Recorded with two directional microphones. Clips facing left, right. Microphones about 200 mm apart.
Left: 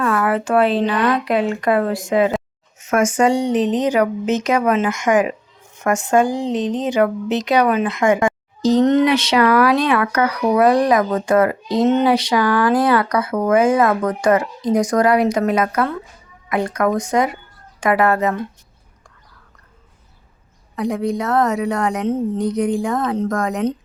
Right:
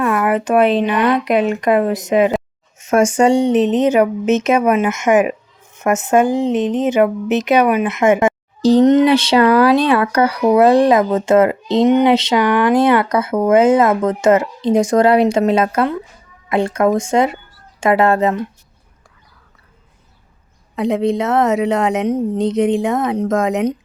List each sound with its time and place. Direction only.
0.0 s speech: 15° right (ahead or behind)
9.0 s speech: 30° right (ahead or behind)
20.7 s speech: 25° right (ahead or behind)